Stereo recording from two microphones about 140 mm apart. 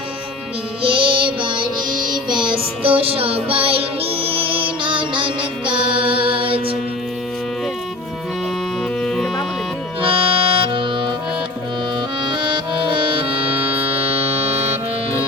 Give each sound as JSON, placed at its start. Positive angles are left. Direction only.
{"t": 0.8, "sound": "music", "side_deg": -40}
{"t": 9.0, "sound": "music", "side_deg": 5}
{"t": 10.0, "sound": "accordion", "side_deg": -40}
{"t": 12.2, "sound": "music", "side_deg": -35}